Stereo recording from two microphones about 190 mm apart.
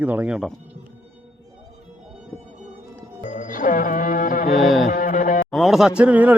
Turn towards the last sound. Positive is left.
turn(degrees=-5)  # may be behind; listen again after turning